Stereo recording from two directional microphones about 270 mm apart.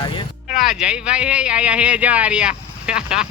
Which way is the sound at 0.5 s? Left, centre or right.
Centre.